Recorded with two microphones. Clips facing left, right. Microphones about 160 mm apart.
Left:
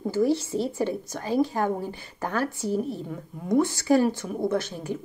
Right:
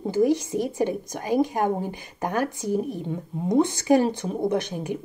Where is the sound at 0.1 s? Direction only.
15° right (ahead or behind).